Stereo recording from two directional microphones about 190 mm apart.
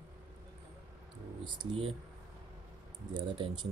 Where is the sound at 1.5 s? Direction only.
30° right (ahead or behind).